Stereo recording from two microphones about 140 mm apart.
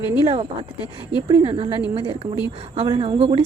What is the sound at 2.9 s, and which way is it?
Speech, 40° right (ahead or behind).